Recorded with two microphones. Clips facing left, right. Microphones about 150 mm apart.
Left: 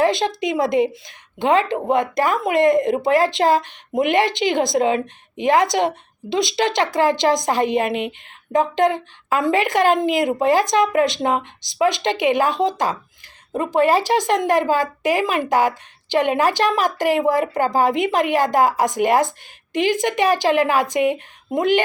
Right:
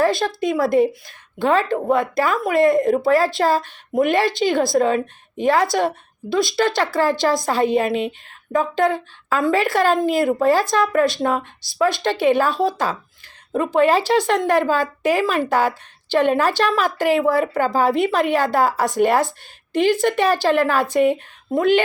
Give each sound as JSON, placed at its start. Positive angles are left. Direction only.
{"t": 0.0, "sound": "speech", "side_deg": 20}